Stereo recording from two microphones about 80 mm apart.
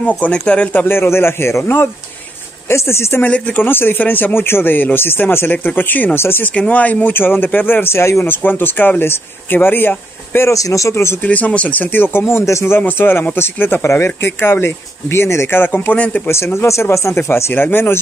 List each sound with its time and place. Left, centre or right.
0.2 s speech: centre
0.7 s speech: left
3.3 s speech: centre
6.5 s speech: centre
10.5 s speech: left
11.1 s speech: centre
16.3 s speech: left